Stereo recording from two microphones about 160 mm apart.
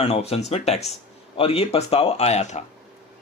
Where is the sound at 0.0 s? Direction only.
40° left (ahead or behind).